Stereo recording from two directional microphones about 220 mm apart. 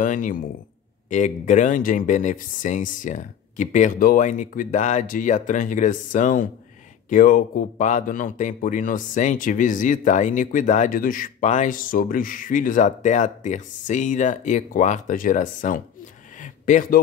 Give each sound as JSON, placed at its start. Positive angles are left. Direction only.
{"t": 0.0, "sound": "speech", "side_deg": 35}